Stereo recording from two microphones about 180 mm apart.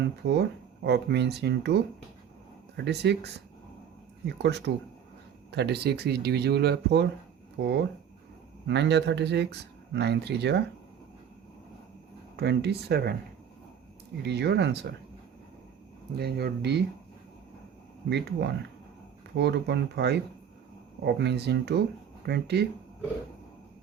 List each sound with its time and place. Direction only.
0.0 s speech: 70° right (ahead or behind)
4.4 s speech: 70° right (ahead or behind)
8.6 s speech: 70° right (ahead or behind)
12.4 s speech: 65° right (ahead or behind)
14.2 s speech: 70° right (ahead or behind)
16.1 s speech: 65° right (ahead or behind)
18.1 s speech: 70° right (ahead or behind)